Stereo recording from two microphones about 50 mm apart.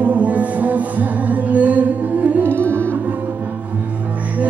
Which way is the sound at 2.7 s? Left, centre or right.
Right.